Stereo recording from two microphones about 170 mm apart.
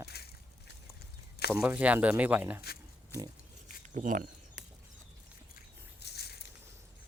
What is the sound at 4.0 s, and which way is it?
Speech, 50° right (ahead or behind).